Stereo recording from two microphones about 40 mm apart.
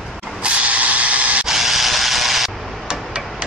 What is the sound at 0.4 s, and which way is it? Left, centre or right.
Vehicle, right.